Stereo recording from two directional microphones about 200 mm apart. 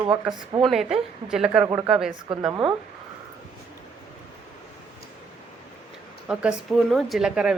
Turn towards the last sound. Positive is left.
turn(degrees=-5)  # may be behind; listen again after turning